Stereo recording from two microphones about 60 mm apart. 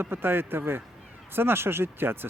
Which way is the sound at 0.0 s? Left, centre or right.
Right.